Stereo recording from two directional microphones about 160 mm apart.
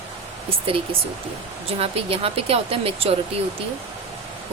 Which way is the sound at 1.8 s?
35° right (ahead or behind).